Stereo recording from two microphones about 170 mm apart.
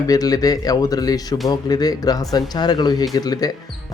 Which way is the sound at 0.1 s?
20° left (ahead or behind).